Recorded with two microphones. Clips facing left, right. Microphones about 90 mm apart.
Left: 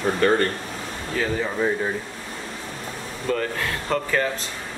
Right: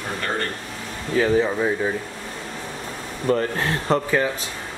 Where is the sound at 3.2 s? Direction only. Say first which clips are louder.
Right 4 dB; 30° right (ahead or behind).